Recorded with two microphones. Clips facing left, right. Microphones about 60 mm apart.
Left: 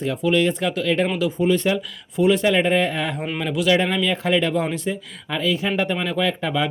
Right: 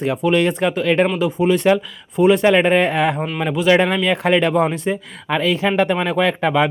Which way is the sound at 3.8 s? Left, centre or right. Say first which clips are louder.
Right 4 dB; right.